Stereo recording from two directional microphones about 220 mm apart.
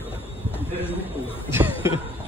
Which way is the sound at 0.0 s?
10° left (ahead or behind).